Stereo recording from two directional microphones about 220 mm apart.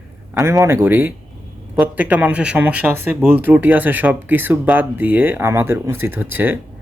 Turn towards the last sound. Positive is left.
turn(degrees=-10)  # may be behind; listen again after turning